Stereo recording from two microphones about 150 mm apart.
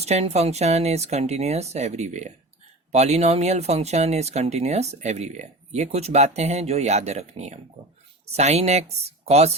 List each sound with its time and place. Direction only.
0.0 s speech: 45° right (ahead or behind)